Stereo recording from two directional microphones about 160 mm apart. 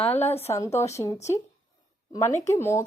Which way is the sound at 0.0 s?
10° left (ahead or behind).